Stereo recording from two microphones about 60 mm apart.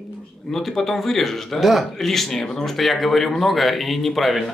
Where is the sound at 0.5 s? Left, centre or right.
Centre.